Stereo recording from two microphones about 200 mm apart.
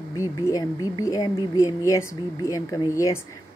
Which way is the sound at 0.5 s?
20° left (ahead or behind).